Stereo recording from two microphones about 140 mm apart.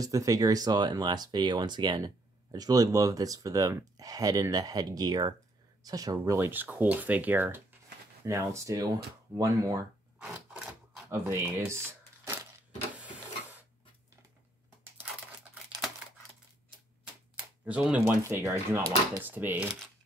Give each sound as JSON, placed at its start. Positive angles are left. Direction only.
{"t": 0.0, "sound": "speech", "side_deg": -25}
{"t": 10.1, "sound": "a sound", "side_deg": -5}
{"t": 11.1, "sound": "speech", "side_deg": -20}
{"t": 13.0, "sound": "printer", "side_deg": -15}
{"t": 17.6, "sound": "speech", "side_deg": -10}
{"t": 18.2, "sound": "speech", "side_deg": -20}